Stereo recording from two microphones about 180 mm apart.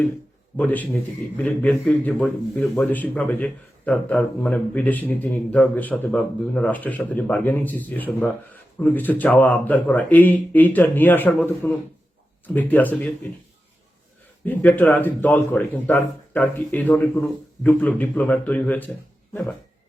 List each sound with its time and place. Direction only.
0.5 s speech: 10° left (ahead or behind)
14.4 s speech: 10° left (ahead or behind)